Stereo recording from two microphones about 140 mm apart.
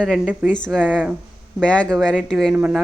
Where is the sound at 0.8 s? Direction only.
10° right (ahead or behind).